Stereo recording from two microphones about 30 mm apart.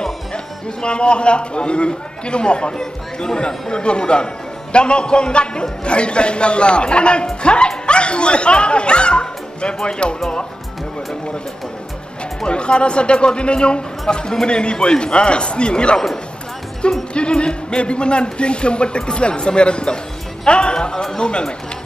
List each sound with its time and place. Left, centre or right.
0.3 s a man's voice: left
2.8 s speech: centre
3.7 s a man's voice: left
12.4 s a man's voice: left
17.1 s a man's voice: left
21.3 s a man's voice: left